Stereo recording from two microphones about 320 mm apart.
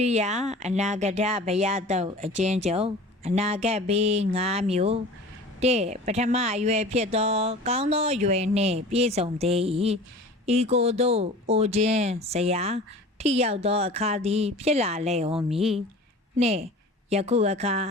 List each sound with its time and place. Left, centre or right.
0.0 s speech: right
16.4 s speech: centre